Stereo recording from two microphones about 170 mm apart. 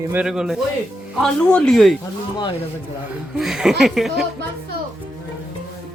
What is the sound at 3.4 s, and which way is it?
Speech, 5° right (ahead or behind).